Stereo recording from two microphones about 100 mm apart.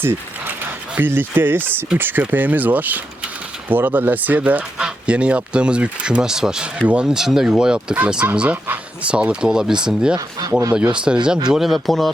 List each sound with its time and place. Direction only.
0.0 s speech: 25° right (ahead or behind); by 12.1 s centre (ahead or behind)